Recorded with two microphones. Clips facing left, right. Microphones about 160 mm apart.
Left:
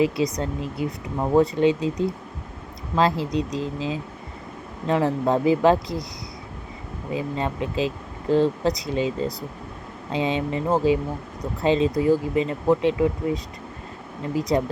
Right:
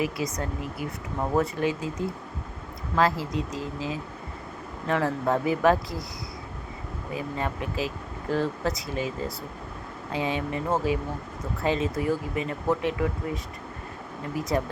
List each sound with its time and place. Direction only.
0.0 s speech: 25° left (ahead or behind)
7.1 s speech: 20° left (ahead or behind)